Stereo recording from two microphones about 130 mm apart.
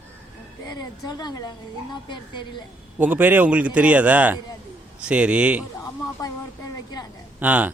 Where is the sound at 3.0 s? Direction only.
15° right (ahead or behind).